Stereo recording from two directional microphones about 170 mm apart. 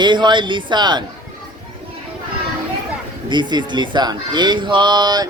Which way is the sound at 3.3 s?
25° right (ahead or behind).